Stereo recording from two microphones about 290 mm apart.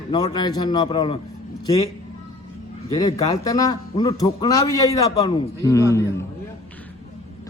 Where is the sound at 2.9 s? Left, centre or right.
Centre.